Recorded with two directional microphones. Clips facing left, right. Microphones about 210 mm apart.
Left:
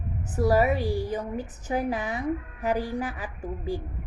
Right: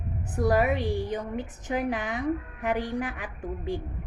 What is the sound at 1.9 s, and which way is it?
A woman's voice, 40° left (ahead or behind).